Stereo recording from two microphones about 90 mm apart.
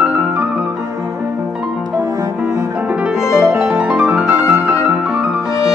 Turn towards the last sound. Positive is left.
turn(degrees=-15)  # may be behind; listen again after turning